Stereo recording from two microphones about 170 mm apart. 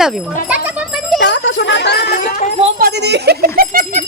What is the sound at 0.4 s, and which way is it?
Music, 5° right (ahead or behind).